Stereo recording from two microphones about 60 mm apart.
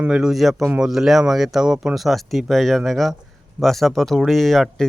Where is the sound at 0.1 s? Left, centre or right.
Centre.